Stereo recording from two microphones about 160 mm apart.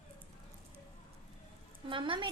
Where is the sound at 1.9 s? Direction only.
30° right (ahead or behind).